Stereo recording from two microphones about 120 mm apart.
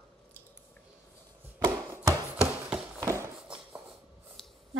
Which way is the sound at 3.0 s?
25° right (ahead or behind).